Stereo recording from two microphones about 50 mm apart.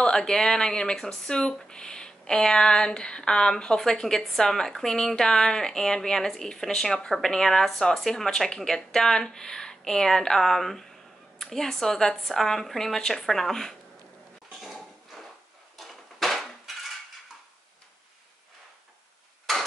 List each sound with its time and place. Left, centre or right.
0.0 s speech: centre
14.6 s a sound: centre
15.8 s dishes: centre